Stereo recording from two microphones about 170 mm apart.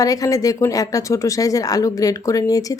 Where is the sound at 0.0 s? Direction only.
20° left (ahead or behind).